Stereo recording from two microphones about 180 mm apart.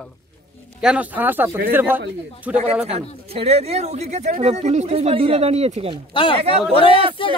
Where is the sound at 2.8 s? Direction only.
35° right (ahead or behind).